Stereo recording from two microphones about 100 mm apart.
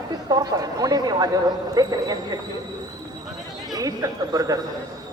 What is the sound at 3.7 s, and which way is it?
Speech, 35° right (ahead or behind).